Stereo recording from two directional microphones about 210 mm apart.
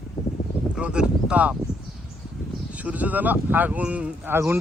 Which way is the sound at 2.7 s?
5° right (ahead or behind).